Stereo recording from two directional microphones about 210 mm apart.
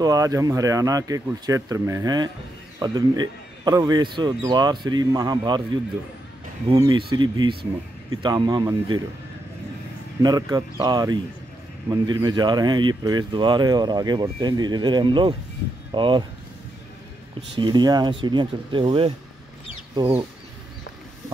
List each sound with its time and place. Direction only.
0.0 s speech: 15° right (ahead or behind)
6.7 s speech: 20° right (ahead or behind)
10.2 s speech: 20° right (ahead or behind)
17.6 s speech: 20° right (ahead or behind)